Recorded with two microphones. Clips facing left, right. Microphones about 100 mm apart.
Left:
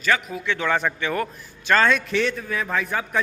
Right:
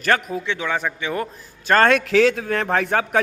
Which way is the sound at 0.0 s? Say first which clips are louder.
Right 3 dB; 50° right (ahead or behind).